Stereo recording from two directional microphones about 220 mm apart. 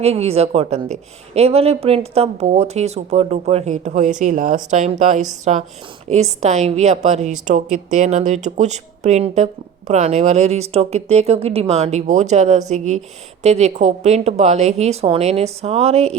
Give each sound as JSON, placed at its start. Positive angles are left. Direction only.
{"t": 0.0, "sound": "a woman's voice", "side_deg": -30}